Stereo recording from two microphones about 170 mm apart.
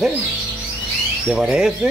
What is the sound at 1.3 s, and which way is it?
Speech, 5° right (ahead or behind).